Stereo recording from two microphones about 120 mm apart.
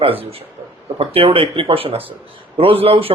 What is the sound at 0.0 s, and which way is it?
A man's voice, 50° right (ahead or behind).